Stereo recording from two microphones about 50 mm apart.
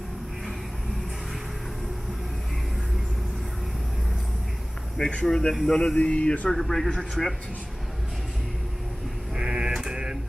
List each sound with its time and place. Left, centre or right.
5.2 s speech: centre
6.5 s a man's voice: centre
9.3 s a sound: centre